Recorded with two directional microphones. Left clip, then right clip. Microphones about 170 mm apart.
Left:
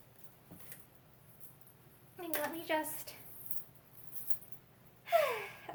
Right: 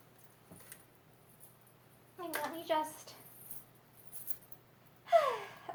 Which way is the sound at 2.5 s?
20° left (ahead or behind).